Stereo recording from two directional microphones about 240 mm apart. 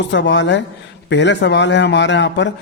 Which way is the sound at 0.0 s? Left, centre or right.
Left.